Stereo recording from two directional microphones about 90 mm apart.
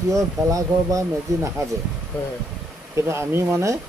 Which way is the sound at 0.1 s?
35° right (ahead or behind).